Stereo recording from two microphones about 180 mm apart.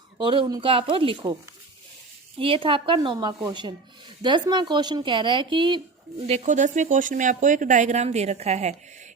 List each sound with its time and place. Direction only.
0.2 s speech: 25° right (ahead or behind)
2.4 s speech: 30° right (ahead or behind)
6.2 s speech: 40° right (ahead or behind)